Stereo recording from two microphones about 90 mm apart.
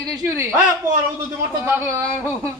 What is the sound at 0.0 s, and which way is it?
Speech, 40° right (ahead or behind).